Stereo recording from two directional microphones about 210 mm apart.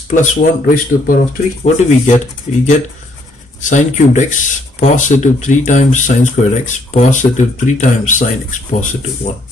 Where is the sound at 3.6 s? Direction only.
35° left (ahead or behind).